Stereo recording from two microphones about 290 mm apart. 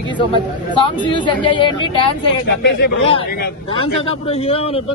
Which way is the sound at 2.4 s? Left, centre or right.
Left.